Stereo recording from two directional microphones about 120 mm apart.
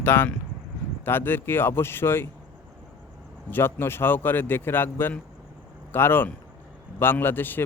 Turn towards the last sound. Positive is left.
turn(degrees=15)  # may be behind; listen again after turning